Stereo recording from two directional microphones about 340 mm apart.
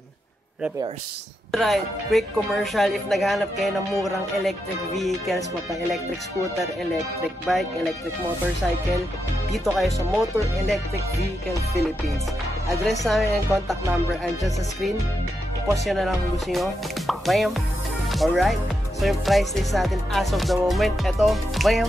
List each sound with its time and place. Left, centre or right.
1.5 s speech: centre
7.5 s speech: centre
9.5 s speech: centre
12.9 s speech: centre
15.9 s speech: centre